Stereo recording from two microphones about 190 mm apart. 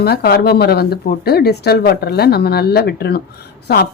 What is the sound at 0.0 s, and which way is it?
Speech, 55° left (ahead or behind).